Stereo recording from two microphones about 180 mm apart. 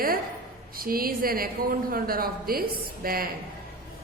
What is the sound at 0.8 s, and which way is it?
A woman's voice, 55° right (ahead or behind).